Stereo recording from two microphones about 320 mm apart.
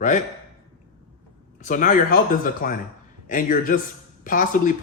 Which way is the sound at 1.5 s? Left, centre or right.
Left.